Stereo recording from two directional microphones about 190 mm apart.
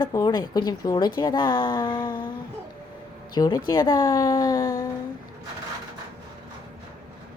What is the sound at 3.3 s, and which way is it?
A woman's voice, 20° left (ahead or behind).